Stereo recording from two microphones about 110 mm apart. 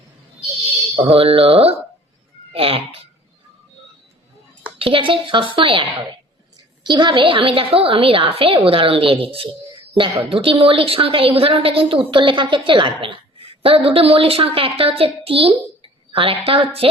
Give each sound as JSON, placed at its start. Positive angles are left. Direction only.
{"t": 0.9, "sound": "a woman's voice", "side_deg": -60}
{"t": 4.8, "sound": "a woman's voice", "side_deg": -50}